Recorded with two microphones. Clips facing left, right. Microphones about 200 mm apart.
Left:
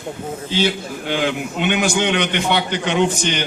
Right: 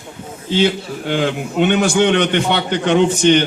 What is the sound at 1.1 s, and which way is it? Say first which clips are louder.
A man's voice: right 2 dB; 50° right (ahead or behind).